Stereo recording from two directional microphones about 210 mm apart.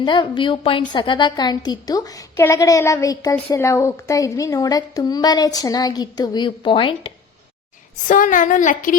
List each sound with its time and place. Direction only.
0.0 s a woman's voice: 20° left (ahead or behind)
8.0 s a woman's voice: 40° left (ahead or behind)